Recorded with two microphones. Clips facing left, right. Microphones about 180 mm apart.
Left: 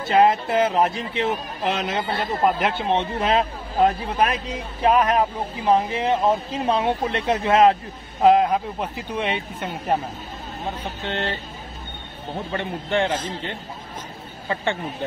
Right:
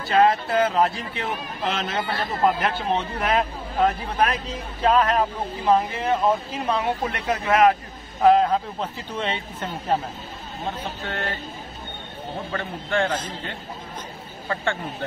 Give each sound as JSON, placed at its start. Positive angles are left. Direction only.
{"t": 0.0, "sound": "a man's voice", "side_deg": 20}
{"t": 11.1, "sound": "a man's voice", "side_deg": 25}
{"t": 12.5, "sound": "a man's voice", "side_deg": 20}
{"t": 14.5, "sound": "a man's voice", "side_deg": 20}